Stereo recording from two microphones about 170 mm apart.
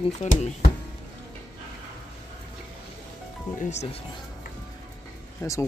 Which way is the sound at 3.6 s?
40° left (ahead or behind).